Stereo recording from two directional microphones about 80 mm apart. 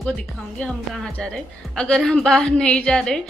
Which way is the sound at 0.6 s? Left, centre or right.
Centre.